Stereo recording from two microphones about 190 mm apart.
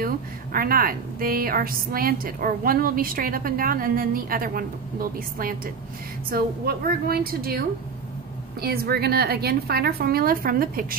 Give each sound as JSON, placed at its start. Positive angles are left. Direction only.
{"t": 0.0, "sound": "a woman's voice", "side_deg": -50}
{"t": 6.3, "sound": "a woman's voice", "side_deg": -50}